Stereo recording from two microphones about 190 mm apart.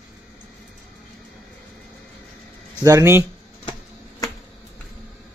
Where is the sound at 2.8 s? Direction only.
15° right (ahead or behind).